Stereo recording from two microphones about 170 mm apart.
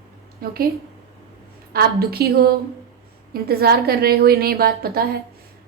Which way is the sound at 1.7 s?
65° right (ahead or behind).